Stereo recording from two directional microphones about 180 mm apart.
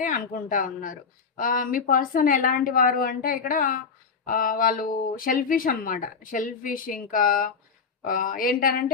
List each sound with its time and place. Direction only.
0.0 s speech: 50° left (ahead or behind)